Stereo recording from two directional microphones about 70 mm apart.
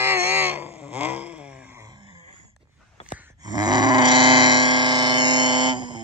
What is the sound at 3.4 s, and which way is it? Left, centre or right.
Groan, right.